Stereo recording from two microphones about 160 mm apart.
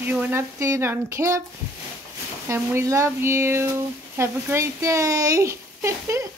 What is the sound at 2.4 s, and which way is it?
Speech, 15° right (ahead or behind).